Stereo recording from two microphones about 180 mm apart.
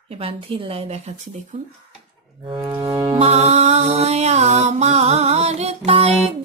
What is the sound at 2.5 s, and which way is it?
Music, 25° right (ahead or behind).